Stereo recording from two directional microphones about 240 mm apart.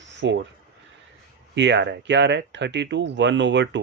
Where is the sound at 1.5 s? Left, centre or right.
Right.